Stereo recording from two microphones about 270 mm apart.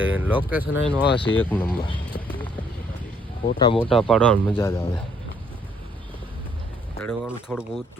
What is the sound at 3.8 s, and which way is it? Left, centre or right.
Speech, centre.